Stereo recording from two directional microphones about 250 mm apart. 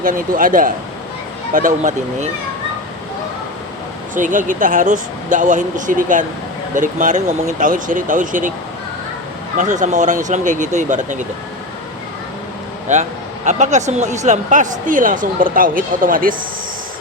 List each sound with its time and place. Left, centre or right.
0.0 s a man's voice: right
4.1 s a man's voice: right
9.6 s speech: right
12.9 s a man's voice: right